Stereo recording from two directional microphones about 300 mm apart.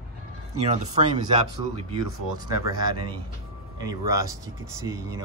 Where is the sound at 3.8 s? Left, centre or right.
Centre.